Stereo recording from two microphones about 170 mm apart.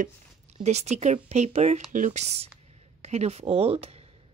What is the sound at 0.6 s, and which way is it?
Speech, 40° right (ahead or behind).